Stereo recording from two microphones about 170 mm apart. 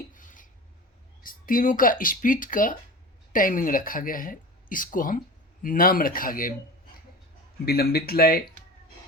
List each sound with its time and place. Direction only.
0.1 s filing: 50° left (ahead or behind)
1.2 s speech: 55° left (ahead or behind)
7.6 s speech: 65° left (ahead or behind)